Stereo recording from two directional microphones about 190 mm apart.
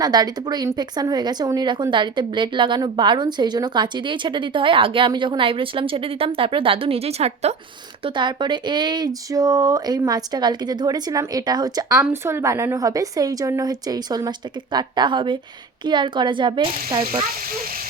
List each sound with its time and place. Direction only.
0.0 s speech: 20° right (ahead or behind)